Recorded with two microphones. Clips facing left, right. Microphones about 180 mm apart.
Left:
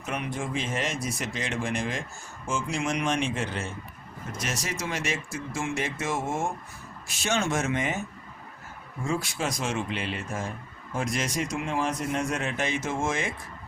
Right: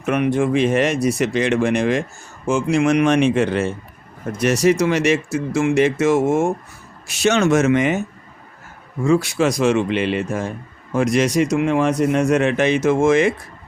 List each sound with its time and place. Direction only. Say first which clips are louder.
0.0 s speech: right 14 dB; 70° right (ahead or behind)
9.0 s speech: right 13 dB; 75° right (ahead or behind)